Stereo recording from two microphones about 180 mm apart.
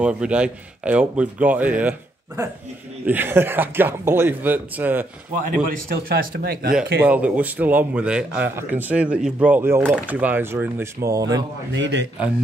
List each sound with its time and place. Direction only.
0.0 s a man's voice: 5° right (ahead or behind)
5.9 s speech: 55° right (ahead or behind)
7.0 s a man's voice: 10° right (ahead or behind)
11.7 s speech: 85° right